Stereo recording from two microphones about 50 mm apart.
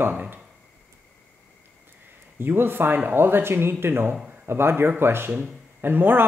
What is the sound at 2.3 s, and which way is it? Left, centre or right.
Speech, right.